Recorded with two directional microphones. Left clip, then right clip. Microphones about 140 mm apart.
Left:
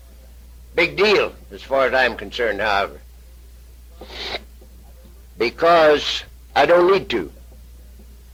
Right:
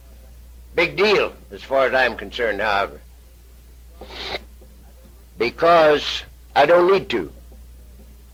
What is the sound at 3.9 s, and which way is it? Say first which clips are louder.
Owl: left 1 dB; 30° left (ahead or behind).